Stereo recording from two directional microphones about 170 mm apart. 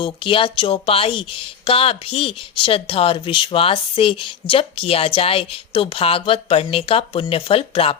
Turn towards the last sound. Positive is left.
turn(degrees=35)  # may be behind; listen again after turning